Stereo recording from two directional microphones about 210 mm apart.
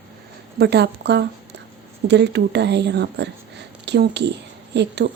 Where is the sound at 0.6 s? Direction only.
50° right (ahead or behind).